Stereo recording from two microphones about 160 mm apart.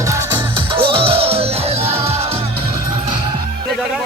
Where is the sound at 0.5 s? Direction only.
30° right (ahead or behind).